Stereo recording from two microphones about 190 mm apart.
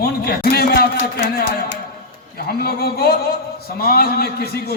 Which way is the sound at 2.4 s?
55° left (ahead or behind).